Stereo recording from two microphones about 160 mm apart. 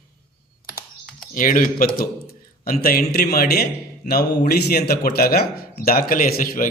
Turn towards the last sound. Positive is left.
turn(degrees=60)  # may be behind; listen again after turning